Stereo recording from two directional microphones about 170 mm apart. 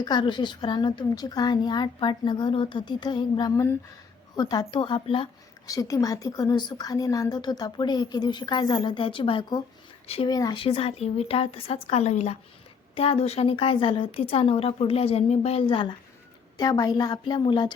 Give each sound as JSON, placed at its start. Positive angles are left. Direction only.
{"t": 0.0, "sound": "a woman's voice", "side_deg": 25}
{"t": 10.6, "sound": "a woman's voice", "side_deg": 35}